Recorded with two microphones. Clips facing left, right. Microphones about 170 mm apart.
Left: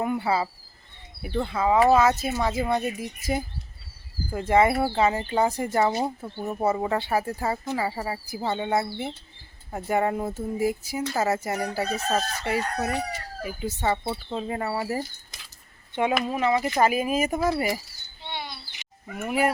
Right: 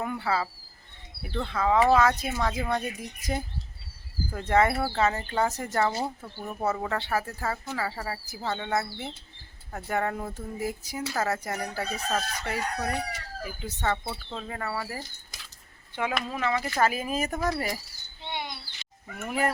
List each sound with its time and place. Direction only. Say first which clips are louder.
0.0 s speech: left 4 dB; 15° left (ahead or behind)
6.6 s speech: left 4 dB; 15° left (ahead or behind)
12.0 s chicken: left 4 dB; 20° left (ahead or behind)
13.4 s speech: left 4 dB; 10° left (ahead or behind)
16.2 s speech: left 5 dB; 20° left (ahead or behind)
18.3 s chirp: even; 20° right (ahead or behind)
18.8 s bird: left 7 dB; 10° left (ahead or behind)